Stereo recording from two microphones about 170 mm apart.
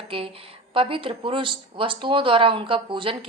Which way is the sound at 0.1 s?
35° right (ahead or behind).